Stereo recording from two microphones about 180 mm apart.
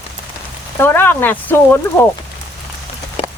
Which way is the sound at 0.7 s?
10° left (ahead or behind).